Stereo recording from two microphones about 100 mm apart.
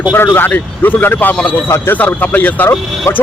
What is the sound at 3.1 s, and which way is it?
Speech, 30° left (ahead or behind).